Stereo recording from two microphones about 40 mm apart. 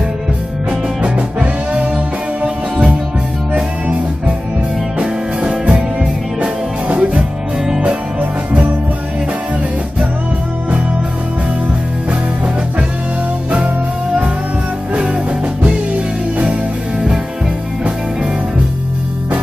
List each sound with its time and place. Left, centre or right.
0.7 s music: right
5.0 s music: right
6.4 s music: right